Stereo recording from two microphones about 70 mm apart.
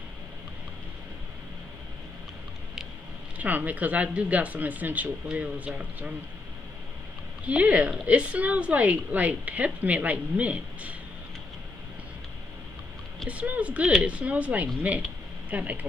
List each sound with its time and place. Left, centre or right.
3.3 s speech: right
7.4 s speech: right
13.3 s speech: centre